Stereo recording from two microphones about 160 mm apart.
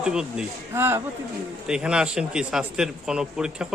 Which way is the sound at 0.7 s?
15° right (ahead or behind).